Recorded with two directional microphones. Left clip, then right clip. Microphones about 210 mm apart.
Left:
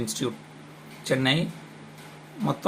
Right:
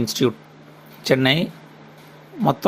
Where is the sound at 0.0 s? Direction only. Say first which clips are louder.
Right 9 dB; 35° right (ahead or behind).